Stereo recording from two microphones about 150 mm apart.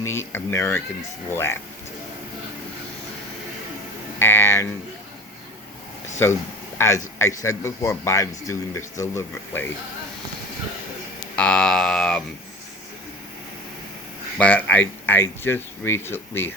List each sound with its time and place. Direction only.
0.0 s speech: 15° left (ahead or behind)
4.2 s speech: 15° left (ahead or behind)
6.2 s a man's voice: 15° left (ahead or behind)
11.3 s a sound: 5° left (ahead or behind)
14.3 s speech: 10° left (ahead or behind)